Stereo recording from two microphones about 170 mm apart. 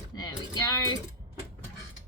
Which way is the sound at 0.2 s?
20° left (ahead or behind).